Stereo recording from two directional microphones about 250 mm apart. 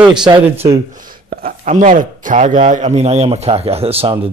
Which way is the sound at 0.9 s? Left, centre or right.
Right.